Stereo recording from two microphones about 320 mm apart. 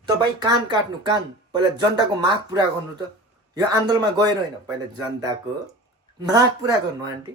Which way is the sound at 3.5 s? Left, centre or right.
Centre.